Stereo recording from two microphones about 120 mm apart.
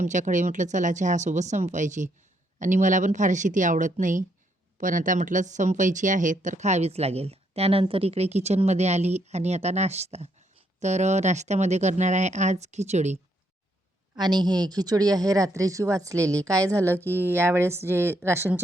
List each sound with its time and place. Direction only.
0.0 s speech: 90° right; by 13.1 s 70° right (ahead or behind)
14.2 s speech: 35° right (ahead or behind); by 18.6 s 20° right (ahead or behind)